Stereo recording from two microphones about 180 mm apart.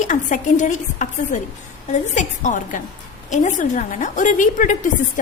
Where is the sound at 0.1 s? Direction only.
45° left (ahead or behind).